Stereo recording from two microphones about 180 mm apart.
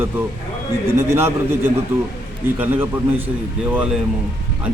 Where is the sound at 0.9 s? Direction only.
15° right (ahead or behind).